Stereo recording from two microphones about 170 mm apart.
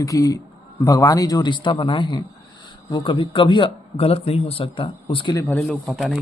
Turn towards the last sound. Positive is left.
turn(degrees=0)  # may be behind; listen again after turning